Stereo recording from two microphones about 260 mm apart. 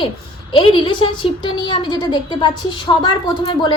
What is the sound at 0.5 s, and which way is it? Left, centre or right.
A woman's voice, centre.